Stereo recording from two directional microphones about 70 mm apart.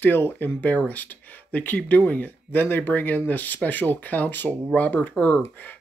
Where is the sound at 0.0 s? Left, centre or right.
Left.